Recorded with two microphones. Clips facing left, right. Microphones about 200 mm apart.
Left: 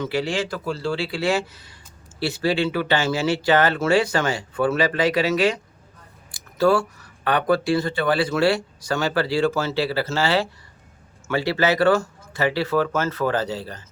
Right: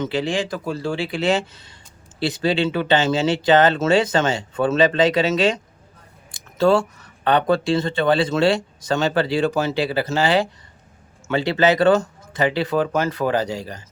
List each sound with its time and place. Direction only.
0.0 s speech: 20° right (ahead or behind)